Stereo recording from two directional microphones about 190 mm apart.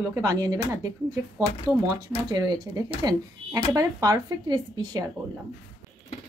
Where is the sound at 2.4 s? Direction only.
20° right (ahead or behind).